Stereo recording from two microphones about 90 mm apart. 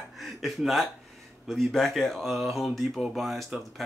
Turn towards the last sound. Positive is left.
turn(degrees=0)  # may be behind; listen again after turning